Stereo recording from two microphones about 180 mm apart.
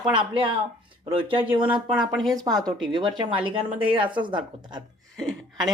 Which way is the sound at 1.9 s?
Centre (ahead or behind).